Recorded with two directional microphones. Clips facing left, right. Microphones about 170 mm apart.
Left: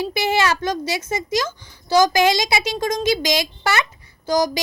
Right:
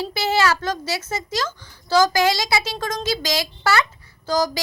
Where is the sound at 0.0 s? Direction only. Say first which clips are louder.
Left 1 dB; 15° left (ahead or behind).